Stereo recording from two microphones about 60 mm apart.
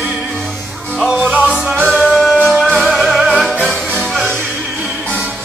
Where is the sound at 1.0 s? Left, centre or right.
Centre.